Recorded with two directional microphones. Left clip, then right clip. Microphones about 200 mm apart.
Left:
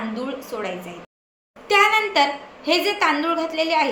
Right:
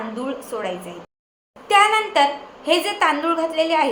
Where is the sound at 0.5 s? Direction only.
5° right (ahead or behind).